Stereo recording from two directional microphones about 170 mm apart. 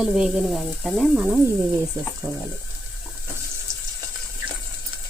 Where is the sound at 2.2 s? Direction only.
15° right (ahead or behind).